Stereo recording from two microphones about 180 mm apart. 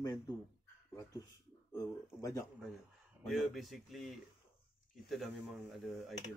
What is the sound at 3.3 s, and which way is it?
Speech, centre (ahead or behind).